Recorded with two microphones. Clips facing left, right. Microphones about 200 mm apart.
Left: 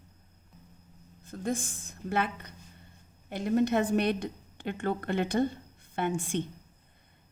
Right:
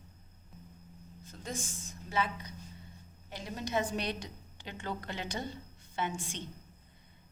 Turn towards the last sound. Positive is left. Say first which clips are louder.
# left 7 dB
turn(degrees=55)  # may be behind; listen again after turning